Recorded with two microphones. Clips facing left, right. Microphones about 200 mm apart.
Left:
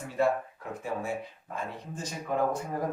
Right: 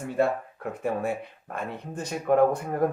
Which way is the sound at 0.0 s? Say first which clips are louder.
Right 2 dB; 60° right (ahead or behind).